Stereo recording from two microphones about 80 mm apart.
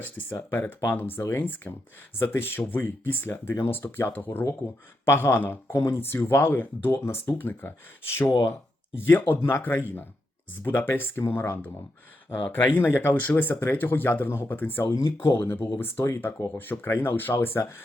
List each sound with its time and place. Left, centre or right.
0.0 s speech: left
2.1 s speech: left
9.0 s speech: left
14.9 s speech: left